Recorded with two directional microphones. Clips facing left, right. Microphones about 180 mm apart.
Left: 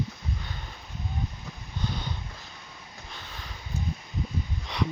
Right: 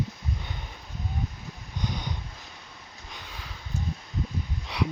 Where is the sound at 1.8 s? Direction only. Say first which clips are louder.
Right 1 dB; 15° right (ahead or behind).